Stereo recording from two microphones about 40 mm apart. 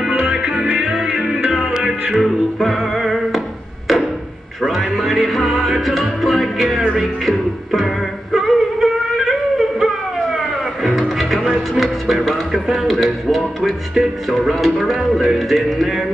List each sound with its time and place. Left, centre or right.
0.3 s music: right
1.6 s music: centre
2.1 s music: centre
4.6 s speech: centre
7.0 s music: centre
12.2 s speech: centre